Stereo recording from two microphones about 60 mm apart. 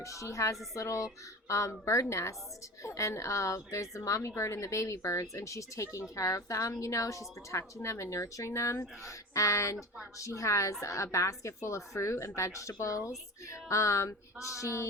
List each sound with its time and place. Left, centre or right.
0.0 s speech: left